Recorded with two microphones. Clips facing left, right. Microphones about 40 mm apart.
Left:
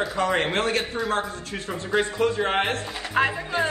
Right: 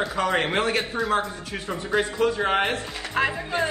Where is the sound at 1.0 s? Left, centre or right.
Centre.